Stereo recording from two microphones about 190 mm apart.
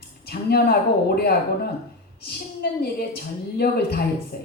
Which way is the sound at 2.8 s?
55° left (ahead or behind).